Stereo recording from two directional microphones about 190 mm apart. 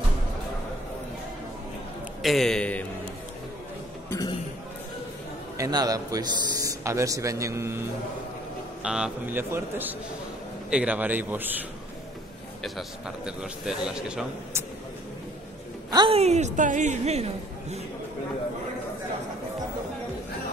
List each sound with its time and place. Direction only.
2.2 s a man's voice: centre (ahead or behind)
4.1 s a sound: 20° left (ahead or behind)
5.6 s speech: 20° right (ahead or behind)
8.8 s a man's voice: 5° right (ahead or behind)
12.6 s a man's voice: centre (ahead or behind)
15.9 s a woman's voice: 25° right (ahead or behind)